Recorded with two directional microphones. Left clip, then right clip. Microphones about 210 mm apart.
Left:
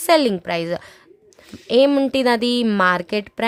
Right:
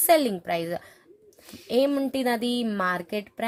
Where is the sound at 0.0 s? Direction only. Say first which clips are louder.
Left 5 dB; 25° left (ahead or behind).